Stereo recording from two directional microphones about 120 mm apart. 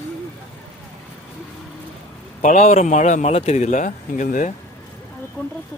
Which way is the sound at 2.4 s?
70° left (ahead or behind).